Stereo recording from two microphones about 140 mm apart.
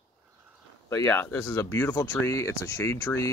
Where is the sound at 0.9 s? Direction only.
20° left (ahead or behind).